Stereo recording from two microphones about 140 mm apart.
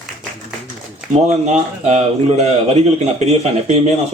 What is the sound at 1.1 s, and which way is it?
Speech, 55° right (ahead or behind).